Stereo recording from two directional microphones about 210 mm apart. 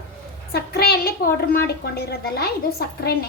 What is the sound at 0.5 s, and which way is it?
A woman's voice, 50° left (ahead or behind).